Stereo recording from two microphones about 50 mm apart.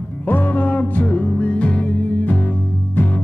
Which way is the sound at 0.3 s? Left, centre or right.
Left.